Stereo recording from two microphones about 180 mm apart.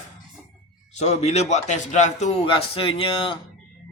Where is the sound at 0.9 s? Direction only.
40° left (ahead or behind).